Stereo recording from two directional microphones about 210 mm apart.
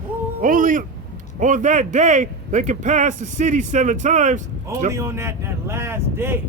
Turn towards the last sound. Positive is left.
turn(degrees=-10)  # may be behind; listen again after turning